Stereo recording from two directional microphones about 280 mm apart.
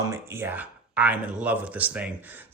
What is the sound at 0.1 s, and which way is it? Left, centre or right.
Speech, centre.